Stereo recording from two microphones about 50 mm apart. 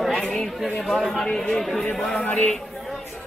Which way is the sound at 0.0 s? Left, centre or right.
Centre.